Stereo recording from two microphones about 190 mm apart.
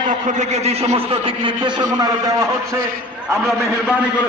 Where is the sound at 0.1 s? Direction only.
40° right (ahead or behind); by 2.8 s 15° right (ahead or behind).